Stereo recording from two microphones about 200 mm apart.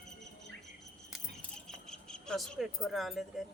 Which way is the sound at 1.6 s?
5° left (ahead or behind).